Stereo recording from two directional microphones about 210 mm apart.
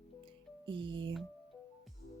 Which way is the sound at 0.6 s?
25° right (ahead or behind).